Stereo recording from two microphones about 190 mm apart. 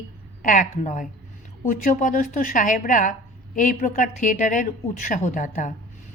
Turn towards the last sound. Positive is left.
turn(degrees=40)  # may be behind; listen again after turning